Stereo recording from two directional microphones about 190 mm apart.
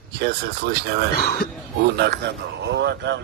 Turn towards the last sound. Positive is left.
turn(degrees=-65)  # may be behind; listen again after turning